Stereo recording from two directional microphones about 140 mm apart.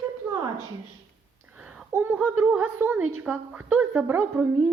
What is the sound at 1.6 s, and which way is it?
A woman's voice, 5° right (ahead or behind).